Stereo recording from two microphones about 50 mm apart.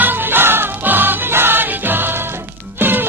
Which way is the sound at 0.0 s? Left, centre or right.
Right.